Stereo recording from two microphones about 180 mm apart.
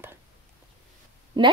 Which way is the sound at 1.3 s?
25° right (ahead or behind).